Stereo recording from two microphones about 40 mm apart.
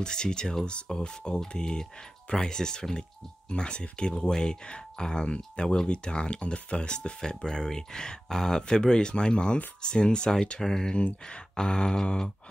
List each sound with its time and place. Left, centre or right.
0.0 s speech: centre
7.2 s speech: centre